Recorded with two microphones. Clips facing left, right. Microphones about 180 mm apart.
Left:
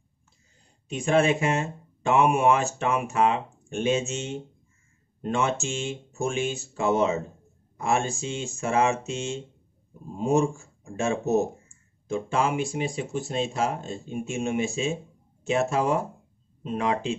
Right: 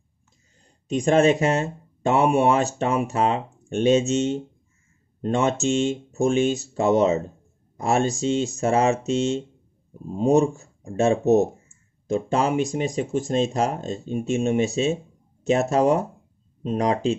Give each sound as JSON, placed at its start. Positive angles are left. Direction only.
{"t": 0.8, "sound": "speech", "side_deg": -40}